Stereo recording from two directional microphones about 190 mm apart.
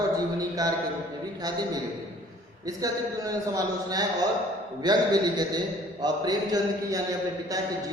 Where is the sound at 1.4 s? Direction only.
20° right (ahead or behind).